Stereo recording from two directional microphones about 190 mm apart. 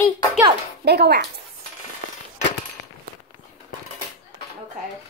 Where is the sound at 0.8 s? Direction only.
60° right (ahead or behind).